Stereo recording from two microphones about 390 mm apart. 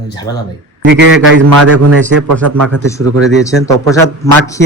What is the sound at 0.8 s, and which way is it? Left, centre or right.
Speech, right.